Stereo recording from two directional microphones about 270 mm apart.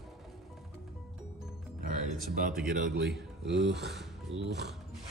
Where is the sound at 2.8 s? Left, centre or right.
Right.